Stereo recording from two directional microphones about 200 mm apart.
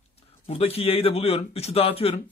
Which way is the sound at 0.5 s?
30° left (ahead or behind).